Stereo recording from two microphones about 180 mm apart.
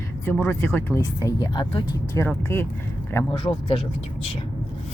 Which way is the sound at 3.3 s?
30° left (ahead or behind).